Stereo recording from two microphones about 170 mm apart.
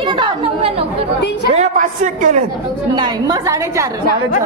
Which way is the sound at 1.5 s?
45° right (ahead or behind).